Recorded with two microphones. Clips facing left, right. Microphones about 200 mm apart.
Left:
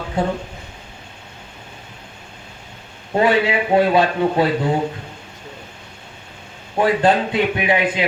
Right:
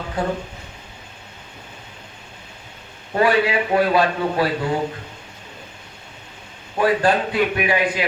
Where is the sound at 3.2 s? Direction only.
25° left (ahead or behind).